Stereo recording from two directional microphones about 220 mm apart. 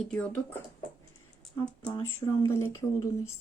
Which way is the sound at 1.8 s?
5° left (ahead or behind).